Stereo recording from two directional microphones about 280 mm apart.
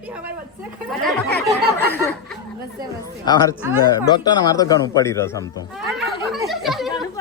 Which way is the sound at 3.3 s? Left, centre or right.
Centre.